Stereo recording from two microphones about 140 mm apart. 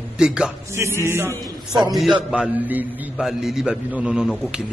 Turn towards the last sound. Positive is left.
turn(degrees=-5)  # may be behind; listen again after turning